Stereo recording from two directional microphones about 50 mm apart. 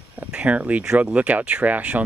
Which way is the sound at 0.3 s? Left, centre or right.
Right.